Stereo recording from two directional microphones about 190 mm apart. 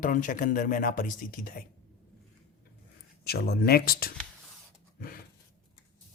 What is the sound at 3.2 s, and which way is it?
Speech, 55° left (ahead or behind).